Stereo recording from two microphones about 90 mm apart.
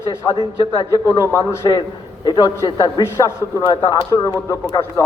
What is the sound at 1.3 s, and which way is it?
Speech, 30° left (ahead or behind).